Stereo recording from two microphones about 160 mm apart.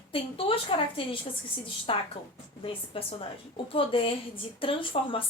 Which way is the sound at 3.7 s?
35° left (ahead or behind).